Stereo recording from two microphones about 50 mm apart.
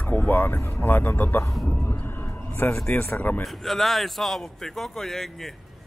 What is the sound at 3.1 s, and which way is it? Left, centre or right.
Speech, left.